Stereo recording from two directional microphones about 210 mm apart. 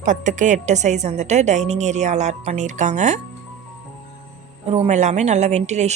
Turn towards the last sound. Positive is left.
turn(degrees=-35)  # may be behind; listen again after turning